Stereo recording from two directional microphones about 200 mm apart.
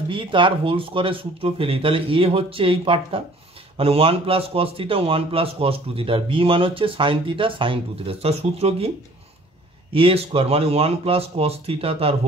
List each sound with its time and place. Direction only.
0.1 s speech: 25° right (ahead or behind)
9.9 s speech: 25° right (ahead or behind)